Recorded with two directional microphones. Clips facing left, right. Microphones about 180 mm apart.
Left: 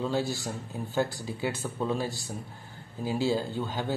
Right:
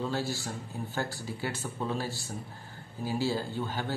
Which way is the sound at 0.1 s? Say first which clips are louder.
Left 3 dB; 15° left (ahead or behind).